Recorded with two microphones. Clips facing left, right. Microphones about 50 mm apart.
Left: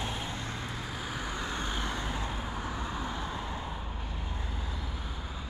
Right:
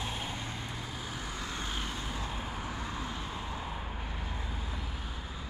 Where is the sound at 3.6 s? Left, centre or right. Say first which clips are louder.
Even; centre.